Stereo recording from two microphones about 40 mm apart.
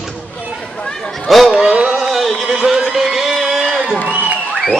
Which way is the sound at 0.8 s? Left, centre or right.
Left.